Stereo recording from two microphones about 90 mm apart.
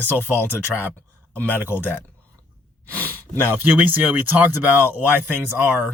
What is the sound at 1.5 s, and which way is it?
Speech, 20° right (ahead or behind).